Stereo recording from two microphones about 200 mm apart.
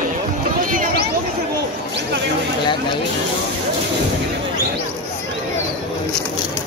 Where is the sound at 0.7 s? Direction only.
40° right (ahead or behind).